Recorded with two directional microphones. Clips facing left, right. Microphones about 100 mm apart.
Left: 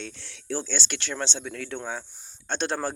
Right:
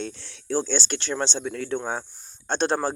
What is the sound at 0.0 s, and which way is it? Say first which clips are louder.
Speech: right 6 dB; 35° right (ahead or behind).